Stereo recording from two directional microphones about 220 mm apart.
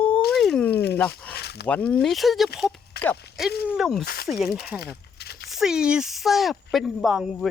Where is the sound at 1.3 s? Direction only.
50° left (ahead or behind).